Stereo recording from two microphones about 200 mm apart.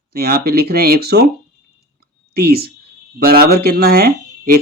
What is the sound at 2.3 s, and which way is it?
Speech, 50° right (ahead or behind).